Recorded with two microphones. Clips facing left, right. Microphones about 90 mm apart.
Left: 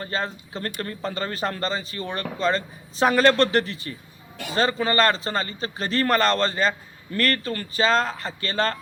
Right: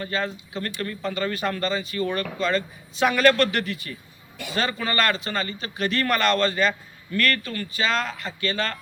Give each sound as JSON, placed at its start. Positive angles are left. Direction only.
{"t": 0.0, "sound": "a man's voice", "side_deg": 35}